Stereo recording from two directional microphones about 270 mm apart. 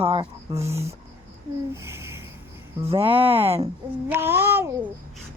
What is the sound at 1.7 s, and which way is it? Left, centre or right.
Babbling, centre.